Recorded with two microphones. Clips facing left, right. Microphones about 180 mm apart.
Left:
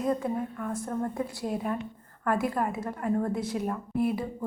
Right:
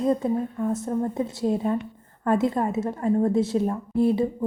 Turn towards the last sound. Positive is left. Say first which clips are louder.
# right 7 dB
turn(degrees=-25)  # may be behind; listen again after turning